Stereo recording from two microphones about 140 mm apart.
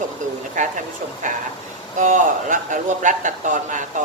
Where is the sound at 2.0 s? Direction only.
65° right (ahead or behind).